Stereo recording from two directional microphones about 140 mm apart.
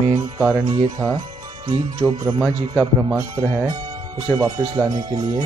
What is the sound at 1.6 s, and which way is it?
Speech, 35° right (ahead or behind).